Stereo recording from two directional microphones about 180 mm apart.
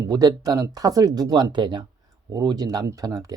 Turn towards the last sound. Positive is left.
turn(degrees=-20)  # may be behind; listen again after turning